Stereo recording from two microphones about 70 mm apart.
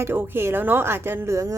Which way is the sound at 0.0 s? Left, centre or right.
Right.